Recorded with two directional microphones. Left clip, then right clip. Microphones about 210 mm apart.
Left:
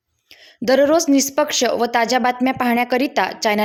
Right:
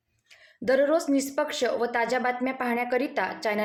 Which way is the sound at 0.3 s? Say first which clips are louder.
Left 7 dB; 45° left (ahead or behind).